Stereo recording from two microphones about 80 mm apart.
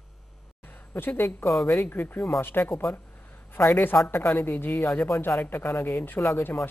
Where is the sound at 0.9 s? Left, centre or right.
Left.